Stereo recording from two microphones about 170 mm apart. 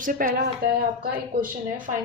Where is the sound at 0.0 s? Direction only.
55° right (ahead or behind).